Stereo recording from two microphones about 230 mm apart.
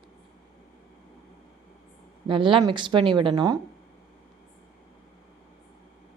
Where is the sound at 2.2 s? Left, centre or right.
Right.